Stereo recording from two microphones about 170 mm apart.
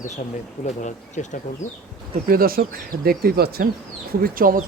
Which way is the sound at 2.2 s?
60° right (ahead or behind).